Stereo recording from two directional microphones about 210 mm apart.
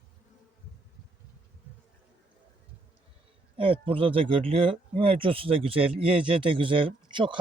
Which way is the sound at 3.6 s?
25° right (ahead or behind).